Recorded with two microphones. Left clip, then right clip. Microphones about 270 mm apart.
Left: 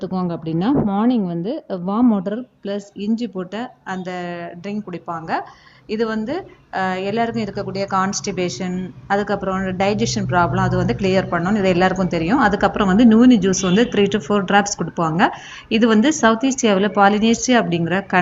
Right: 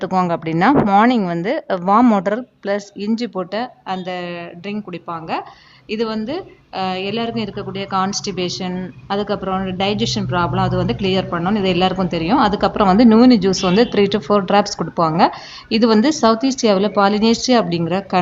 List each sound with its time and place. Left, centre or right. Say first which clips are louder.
0.7 s speech: right 6 dB; right
1.5 s speech: right 6 dB; right
1.8 s speech: right 6 dB; right
2.2 s speech: right 6 dB; centre